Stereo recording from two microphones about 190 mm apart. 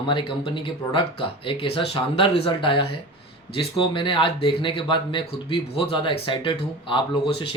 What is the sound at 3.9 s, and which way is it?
Speech, 25° left (ahead or behind).